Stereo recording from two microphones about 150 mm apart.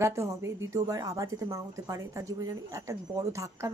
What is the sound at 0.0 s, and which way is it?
A woman's voice, 20° right (ahead or behind).